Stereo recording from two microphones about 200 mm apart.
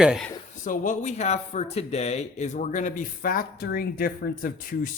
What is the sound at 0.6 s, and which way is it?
Speech, 40° left (ahead or behind).